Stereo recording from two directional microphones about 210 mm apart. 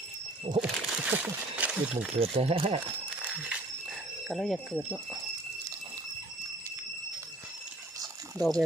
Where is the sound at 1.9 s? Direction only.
30° right (ahead or behind).